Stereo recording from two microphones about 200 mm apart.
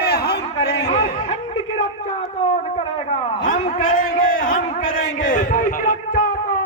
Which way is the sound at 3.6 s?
40° left (ahead or behind).